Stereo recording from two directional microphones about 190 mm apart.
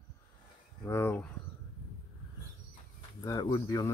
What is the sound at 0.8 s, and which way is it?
Speech, 10° left (ahead or behind).